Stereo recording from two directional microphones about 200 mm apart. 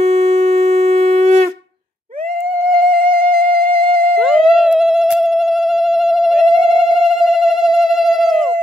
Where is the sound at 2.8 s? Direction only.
45° right (ahead or behind).